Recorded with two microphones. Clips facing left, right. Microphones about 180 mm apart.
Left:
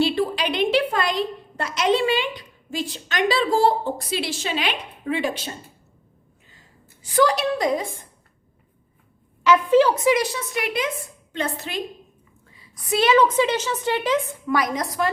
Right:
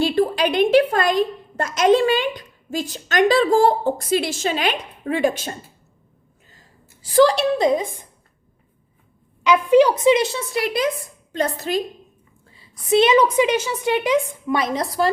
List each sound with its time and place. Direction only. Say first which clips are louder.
0.0 s a woman's voice: right 3 dB; 45° right (ahead or behind)
7.0 s a woman's voice: right 4 dB; 30° right (ahead or behind)
9.4 s a woman's voice: right 2 dB; 15° right (ahead or behind); by 11.8 s 40° right (ahead or behind)
12.5 s a sound: right 2 dB; 30° right (ahead or behind)
12.9 s a woman's voice: right 3 dB; 20° right (ahead or behind)